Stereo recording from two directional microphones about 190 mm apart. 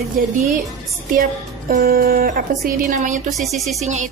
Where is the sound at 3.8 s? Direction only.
40° right (ahead or behind).